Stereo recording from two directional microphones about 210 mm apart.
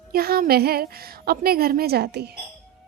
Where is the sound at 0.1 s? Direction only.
45° right (ahead or behind).